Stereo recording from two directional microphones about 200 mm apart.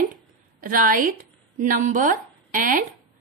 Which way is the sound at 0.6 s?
45° right (ahead or behind).